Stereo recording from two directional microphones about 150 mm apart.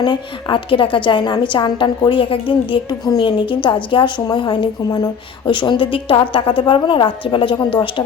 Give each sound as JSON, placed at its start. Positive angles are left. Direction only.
{"t": 0.0, "sound": "a woman's voice", "side_deg": 30}